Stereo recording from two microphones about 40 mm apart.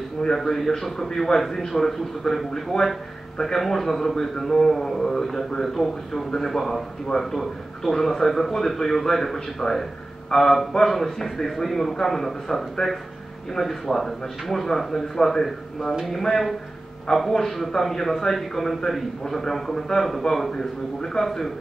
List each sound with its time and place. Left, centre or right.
0.5 s a man's voice: centre